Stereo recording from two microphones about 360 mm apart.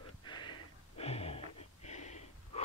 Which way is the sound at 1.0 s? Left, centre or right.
Centre.